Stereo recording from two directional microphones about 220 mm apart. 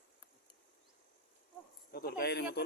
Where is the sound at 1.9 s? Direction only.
45° left (ahead or behind).